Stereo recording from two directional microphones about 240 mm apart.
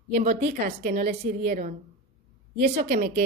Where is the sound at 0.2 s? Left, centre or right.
Right.